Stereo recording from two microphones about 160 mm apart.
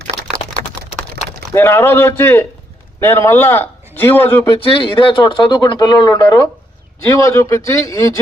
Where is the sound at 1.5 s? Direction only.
15° left (ahead or behind).